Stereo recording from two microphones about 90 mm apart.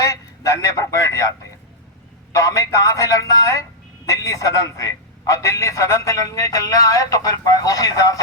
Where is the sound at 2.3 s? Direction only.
40° left (ahead or behind).